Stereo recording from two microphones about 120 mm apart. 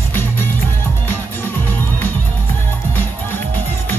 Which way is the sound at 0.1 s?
15° left (ahead or behind).